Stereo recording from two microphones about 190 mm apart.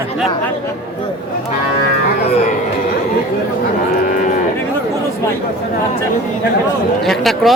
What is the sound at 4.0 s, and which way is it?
Moo, 45° left (ahead or behind).